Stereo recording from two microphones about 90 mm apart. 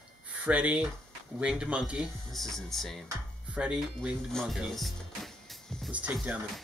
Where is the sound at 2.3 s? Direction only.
5° left (ahead or behind).